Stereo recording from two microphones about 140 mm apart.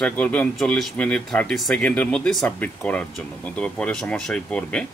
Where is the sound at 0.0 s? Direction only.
10° left (ahead or behind).